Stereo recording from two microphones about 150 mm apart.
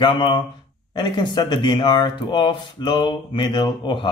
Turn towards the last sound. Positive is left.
turn(degrees=30)  # may be behind; listen again after turning